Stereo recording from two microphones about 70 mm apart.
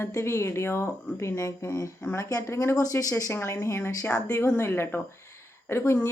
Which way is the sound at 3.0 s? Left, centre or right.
Left.